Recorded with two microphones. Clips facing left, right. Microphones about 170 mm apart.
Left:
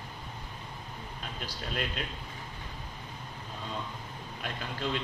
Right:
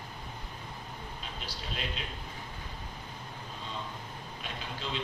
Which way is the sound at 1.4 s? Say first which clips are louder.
Left 5 dB; 50° left (ahead or behind).